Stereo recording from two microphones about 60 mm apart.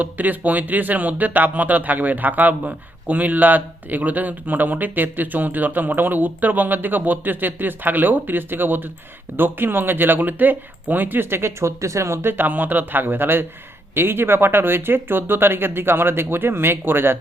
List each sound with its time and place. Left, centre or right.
0.0 s speech: right